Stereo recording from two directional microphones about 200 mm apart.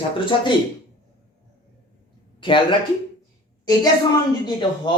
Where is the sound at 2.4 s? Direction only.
25° left (ahead or behind).